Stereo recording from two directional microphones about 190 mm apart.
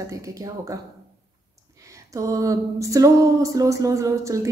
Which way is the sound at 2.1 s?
15° right (ahead or behind).